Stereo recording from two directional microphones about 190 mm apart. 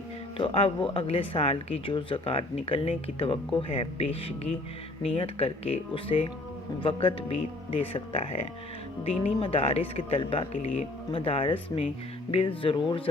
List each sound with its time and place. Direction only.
0.3 s speech: 30° left (ahead or behind)